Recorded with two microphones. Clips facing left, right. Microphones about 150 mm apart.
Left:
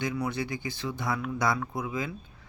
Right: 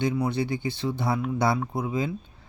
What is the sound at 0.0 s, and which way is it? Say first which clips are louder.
Speech: right 5 dB; 30° right (ahead or behind).